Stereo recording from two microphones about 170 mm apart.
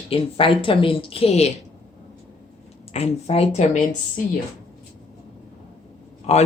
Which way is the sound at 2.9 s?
35° left (ahead or behind).